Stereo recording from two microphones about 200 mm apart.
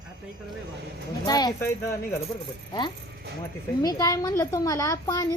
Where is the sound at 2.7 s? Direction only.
20° left (ahead or behind).